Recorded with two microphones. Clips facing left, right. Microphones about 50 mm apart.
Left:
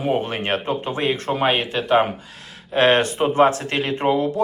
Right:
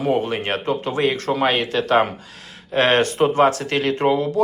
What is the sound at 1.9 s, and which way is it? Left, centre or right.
Speech, centre.